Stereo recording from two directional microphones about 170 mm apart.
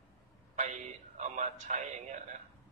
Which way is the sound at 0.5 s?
45° right (ahead or behind).